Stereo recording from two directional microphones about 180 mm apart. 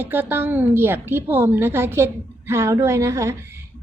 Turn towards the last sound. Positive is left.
turn(degrees=-15)  # may be behind; listen again after turning